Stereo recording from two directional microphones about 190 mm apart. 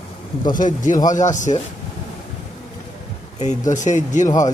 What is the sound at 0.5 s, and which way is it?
A man's voice, 45° left (ahead or behind).